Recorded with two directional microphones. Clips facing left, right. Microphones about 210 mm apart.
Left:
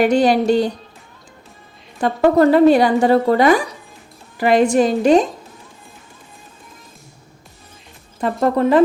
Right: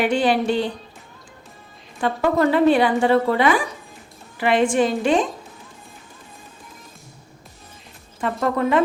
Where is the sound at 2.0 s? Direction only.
40° left (ahead or behind).